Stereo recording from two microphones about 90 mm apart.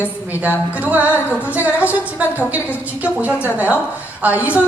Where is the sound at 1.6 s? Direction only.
15° right (ahead or behind).